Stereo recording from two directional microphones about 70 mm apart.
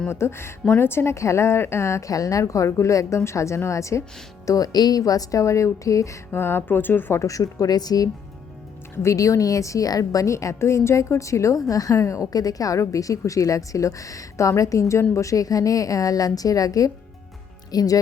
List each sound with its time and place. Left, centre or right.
0.1 s a woman's voice: left
4.4 s a woman's voice: left
6.3 s speech: left
7.2 s a woman's voice: left
9.0 s a woman's voice: left